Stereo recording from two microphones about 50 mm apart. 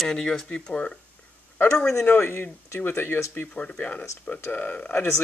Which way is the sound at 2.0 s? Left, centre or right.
Left.